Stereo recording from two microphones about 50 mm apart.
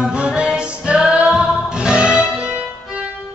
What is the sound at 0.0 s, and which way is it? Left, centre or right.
Music, centre.